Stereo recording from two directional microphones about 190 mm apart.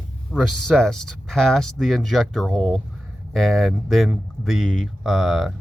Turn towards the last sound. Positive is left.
turn(degrees=0)  # may be behind; listen again after turning